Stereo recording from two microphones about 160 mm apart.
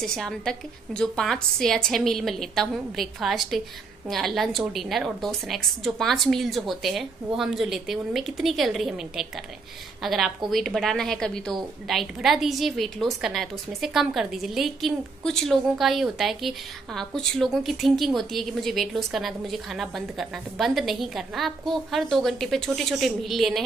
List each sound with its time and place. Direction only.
0.0 s a woman's voice: 5° left (ahead or behind)